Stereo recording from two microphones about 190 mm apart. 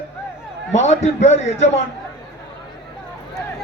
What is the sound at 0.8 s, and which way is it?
Speech, 35° left (ahead or behind).